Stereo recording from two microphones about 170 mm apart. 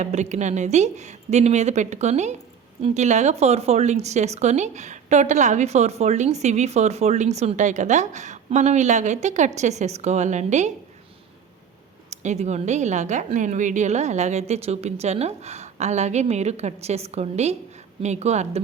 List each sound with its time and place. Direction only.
0.0 s speech: 45° right (ahead or behind)
12.1 s a woman's voice: 45° right (ahead or behind)